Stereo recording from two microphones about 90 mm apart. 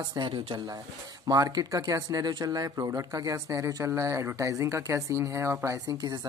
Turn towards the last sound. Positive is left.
turn(degrees=-55)  # may be behind; listen again after turning